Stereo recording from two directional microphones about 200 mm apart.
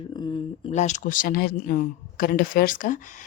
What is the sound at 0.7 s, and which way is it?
Speech, 35° left (ahead or behind).